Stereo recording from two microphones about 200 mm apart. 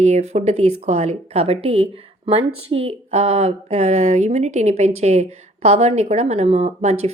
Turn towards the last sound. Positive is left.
turn(degrees=-35)  # may be behind; listen again after turning